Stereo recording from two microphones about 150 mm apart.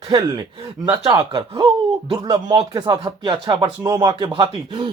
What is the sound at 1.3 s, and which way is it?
Speech, 35° right (ahead or behind).